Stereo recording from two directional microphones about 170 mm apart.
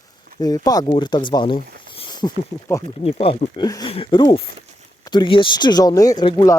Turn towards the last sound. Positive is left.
turn(degrees=25)  # may be behind; listen again after turning